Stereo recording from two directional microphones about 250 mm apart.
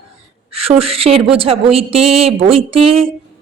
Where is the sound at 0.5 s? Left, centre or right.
Right.